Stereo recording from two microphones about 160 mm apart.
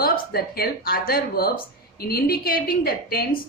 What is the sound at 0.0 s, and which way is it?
A woman's voice, 70° left (ahead or behind).